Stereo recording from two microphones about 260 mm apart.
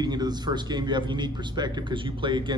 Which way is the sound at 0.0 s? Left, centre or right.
Centre.